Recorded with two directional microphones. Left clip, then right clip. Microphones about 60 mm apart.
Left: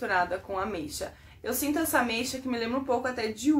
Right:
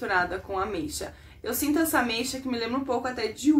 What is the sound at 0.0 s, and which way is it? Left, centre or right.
A woman's voice, centre.